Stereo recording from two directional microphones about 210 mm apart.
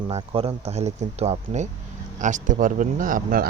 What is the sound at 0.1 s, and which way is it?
Speech, 25° right (ahead or behind).